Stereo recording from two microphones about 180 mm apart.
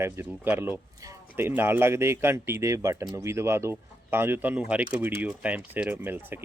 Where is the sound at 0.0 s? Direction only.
10° right (ahead or behind).